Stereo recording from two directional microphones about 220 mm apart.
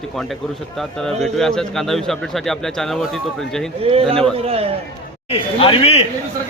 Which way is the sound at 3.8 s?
25° right (ahead or behind).